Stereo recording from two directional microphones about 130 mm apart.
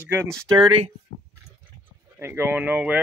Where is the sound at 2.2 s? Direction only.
20° right (ahead or behind).